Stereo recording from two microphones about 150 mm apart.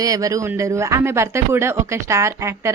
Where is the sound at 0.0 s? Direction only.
25° right (ahead or behind).